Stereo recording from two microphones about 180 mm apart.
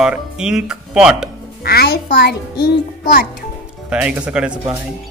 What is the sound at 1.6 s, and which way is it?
A child's voice, 60° left (ahead or behind).